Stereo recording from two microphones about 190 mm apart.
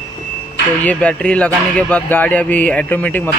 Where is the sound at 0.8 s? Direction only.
5° left (ahead or behind).